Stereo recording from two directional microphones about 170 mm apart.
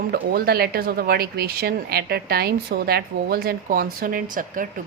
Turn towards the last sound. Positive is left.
turn(degrees=-55)  # may be behind; listen again after turning